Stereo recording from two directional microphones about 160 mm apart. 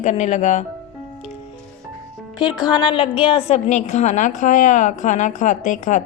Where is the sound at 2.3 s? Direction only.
30° left (ahead or behind).